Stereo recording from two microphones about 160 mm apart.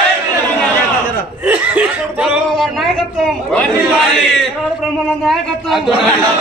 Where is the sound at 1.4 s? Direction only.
10° right (ahead or behind); by 3.9 s 5° left (ahead or behind).